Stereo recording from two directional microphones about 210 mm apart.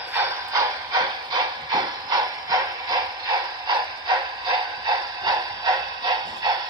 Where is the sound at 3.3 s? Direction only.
20° right (ahead or behind).